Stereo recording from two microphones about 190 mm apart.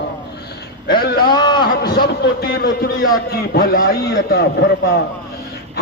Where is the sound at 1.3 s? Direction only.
25° left (ahead or behind).